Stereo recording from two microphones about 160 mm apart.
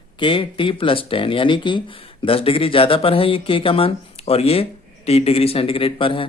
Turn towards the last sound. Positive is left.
turn(degrees=35)  # may be behind; listen again after turning